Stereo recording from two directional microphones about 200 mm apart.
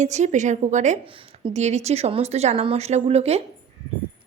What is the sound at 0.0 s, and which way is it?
A woman's voice, 35° right (ahead or behind).